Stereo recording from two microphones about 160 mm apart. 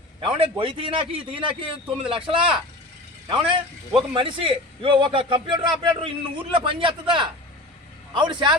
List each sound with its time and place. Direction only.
0.3 s a man's voice: 35° right (ahead or behind)